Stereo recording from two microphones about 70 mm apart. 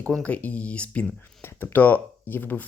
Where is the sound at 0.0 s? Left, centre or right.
Centre.